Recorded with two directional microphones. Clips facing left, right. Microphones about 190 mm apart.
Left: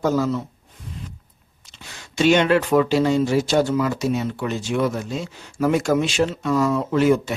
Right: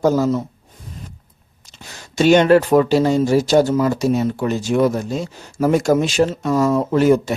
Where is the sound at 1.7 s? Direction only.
40° right (ahead or behind).